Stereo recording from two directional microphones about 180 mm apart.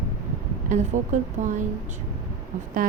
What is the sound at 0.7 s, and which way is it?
Speech, 45° right (ahead or behind).